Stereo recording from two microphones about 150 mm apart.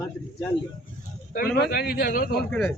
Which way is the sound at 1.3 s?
80° left.